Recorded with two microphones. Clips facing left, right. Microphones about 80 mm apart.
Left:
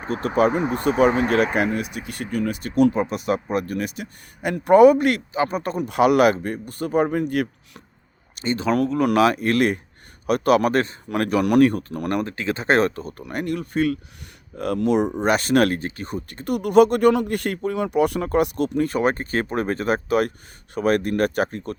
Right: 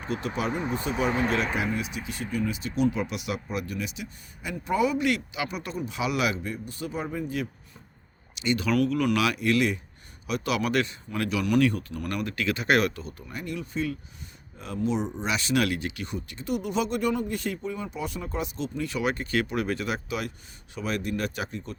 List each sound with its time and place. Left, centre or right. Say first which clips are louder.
0.0 s speech: left 10 dB; left
3.0 s speech: left 8 dB; left
5.7 s speech: left 13 dB; left
8.4 s speech: left 3 dB; left
13.2 s speech: left 9 dB; left